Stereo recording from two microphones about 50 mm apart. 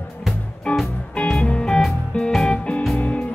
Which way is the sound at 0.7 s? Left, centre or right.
Left.